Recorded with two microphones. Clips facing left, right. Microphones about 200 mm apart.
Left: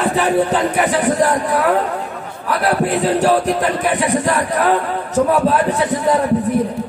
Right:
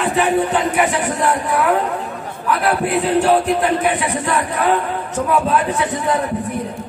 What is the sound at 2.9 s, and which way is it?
A man's voice, 40° left (ahead or behind).